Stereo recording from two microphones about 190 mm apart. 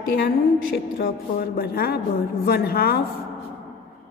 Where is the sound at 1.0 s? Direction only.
55° left (ahead or behind).